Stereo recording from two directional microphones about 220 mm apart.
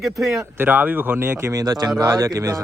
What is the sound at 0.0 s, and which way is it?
Speech, centre (ahead or behind).